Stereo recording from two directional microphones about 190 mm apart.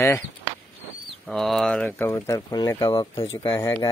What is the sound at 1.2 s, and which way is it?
Speech, centre (ahead or behind).